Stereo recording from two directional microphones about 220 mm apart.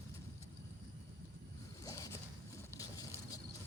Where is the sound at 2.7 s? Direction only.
15° left (ahead or behind).